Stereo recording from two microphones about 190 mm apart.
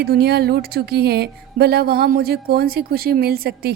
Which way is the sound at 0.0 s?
55° right (ahead or behind).